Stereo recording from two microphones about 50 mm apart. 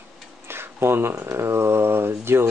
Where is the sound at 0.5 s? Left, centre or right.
Right.